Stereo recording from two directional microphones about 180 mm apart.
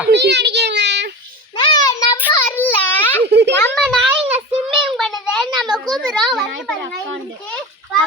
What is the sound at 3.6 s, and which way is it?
Speech, 5° left (ahead or behind).